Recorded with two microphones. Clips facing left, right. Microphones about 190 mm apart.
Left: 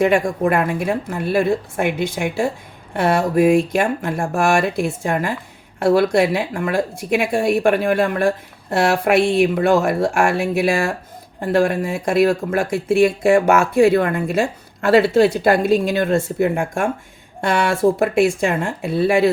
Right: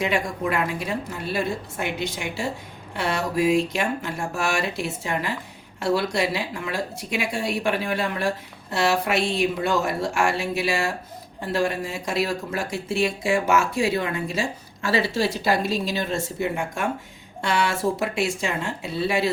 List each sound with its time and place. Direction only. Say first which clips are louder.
0.0 s speech: left 8 dB; 50° left (ahead or behind)